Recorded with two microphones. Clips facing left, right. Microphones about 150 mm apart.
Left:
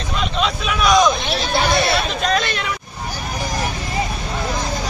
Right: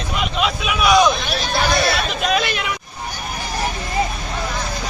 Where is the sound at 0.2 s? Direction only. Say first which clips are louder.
Even; 5° right (ahead or behind).